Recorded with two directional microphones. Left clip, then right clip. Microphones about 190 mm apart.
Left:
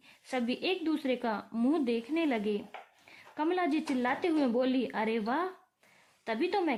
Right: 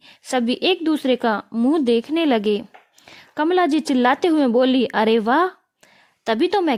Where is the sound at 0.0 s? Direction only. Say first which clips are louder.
Right 13 dB; 50° right (ahead or behind).